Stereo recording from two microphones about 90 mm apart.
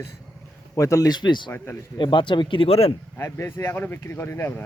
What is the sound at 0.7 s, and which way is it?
Speech, 35° left (ahead or behind).